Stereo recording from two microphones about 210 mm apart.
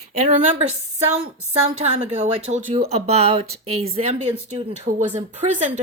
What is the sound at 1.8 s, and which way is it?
Speech, 35° right (ahead or behind).